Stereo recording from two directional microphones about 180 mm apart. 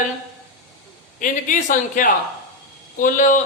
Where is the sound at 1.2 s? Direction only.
50° left (ahead or behind).